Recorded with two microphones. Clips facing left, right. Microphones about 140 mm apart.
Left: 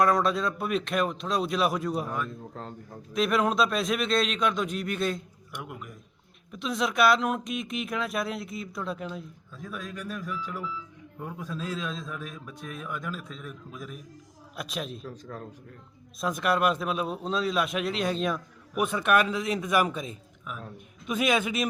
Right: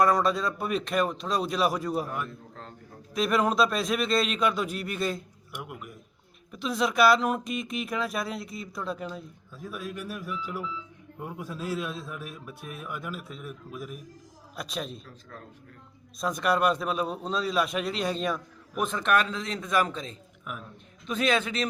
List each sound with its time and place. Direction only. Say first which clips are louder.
0.0 s speech: even; centre (ahead or behind)
2.6 s speech: left 6 dB; 40° left (ahead or behind)
3.1 s a man's voice: even; centre (ahead or behind)
15.0 s speech: left 8 dB; 40° left (ahead or behind)
16.2 s a man's voice: even; centre (ahead or behind)